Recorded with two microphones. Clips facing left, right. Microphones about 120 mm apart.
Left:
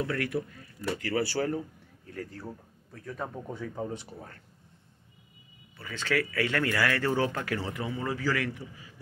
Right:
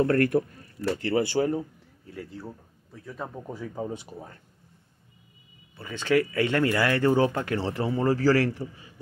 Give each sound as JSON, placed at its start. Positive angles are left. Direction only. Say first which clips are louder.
{"t": 0.0, "sound": "speech", "louder": "right 9 dB", "side_deg": -50}
{"t": 2.3, "sound": "speech", "louder": "right 2 dB", "side_deg": -5}
{"t": 5.8, "sound": "speech", "louder": "right 6 dB", "side_deg": -20}